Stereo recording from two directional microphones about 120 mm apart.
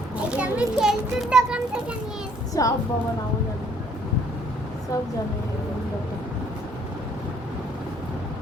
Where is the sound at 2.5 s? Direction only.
30° left (ahead or behind).